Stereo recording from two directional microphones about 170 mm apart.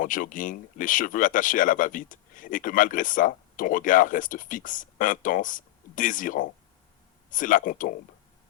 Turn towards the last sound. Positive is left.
turn(degrees=50)  # may be behind; listen again after turning